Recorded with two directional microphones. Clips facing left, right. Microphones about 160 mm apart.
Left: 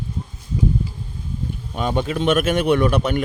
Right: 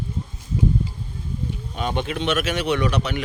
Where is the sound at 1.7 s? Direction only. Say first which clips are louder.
Left 4 dB; 40° left (ahead or behind).